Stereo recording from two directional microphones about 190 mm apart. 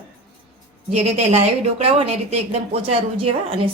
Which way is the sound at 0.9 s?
35° right (ahead or behind).